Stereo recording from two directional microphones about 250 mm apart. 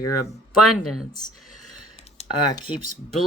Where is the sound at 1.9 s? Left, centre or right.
Left.